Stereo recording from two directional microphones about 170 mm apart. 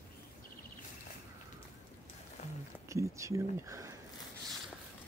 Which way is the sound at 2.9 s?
20° right (ahead or behind).